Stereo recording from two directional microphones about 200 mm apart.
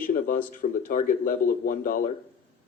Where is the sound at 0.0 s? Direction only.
45° left (ahead or behind).